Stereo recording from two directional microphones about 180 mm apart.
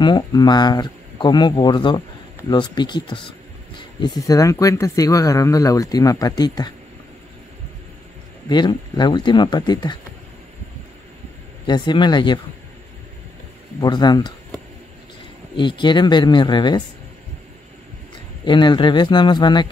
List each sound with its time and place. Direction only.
0.0 s speech: 25° left (ahead or behind)
8.5 s speech: 25° left (ahead or behind)
11.6 s speech: 25° left (ahead or behind)
13.7 s speech: 25° left (ahead or behind)
15.5 s speech: 25° left (ahead or behind)
18.4 s speech: 25° left (ahead or behind)